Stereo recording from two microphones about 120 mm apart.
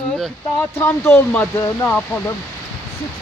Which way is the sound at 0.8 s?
20° left (ahead or behind).